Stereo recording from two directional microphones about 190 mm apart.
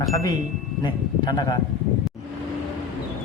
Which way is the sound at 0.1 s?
15° left (ahead or behind).